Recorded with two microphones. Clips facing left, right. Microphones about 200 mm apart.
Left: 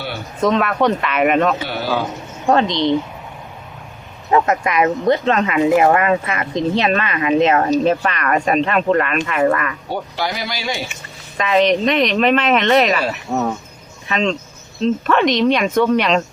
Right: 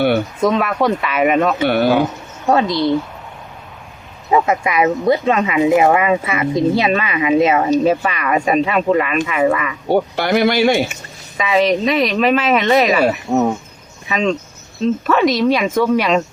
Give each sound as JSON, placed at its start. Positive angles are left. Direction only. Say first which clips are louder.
{"t": 0.4, "sound": "speech", "louder": "left 1 dB", "side_deg": -10}
{"t": 1.6, "sound": "speech", "louder": "right 8 dB", "side_deg": -60}
{"t": 2.5, "sound": "speech", "louder": "right 1 dB", "side_deg": -10}
{"t": 4.3, "sound": "speech", "louder": "right 1 dB", "side_deg": -10}
{"t": 9.9, "sound": "speech", "louder": "right 11 dB", "side_deg": -60}
{"t": 11.3, "sound": "a woman's voice", "louder": "even", "side_deg": -5}
{"t": 14.1, "sound": "speech", "louder": "right 2 dB", "side_deg": -10}